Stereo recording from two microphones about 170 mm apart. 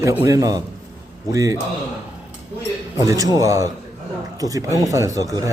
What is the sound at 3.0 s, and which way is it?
Speech, 20° right (ahead or behind).